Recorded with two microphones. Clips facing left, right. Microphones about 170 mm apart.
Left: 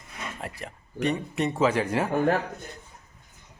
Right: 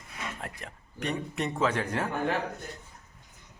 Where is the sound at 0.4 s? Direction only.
5° left (ahead or behind).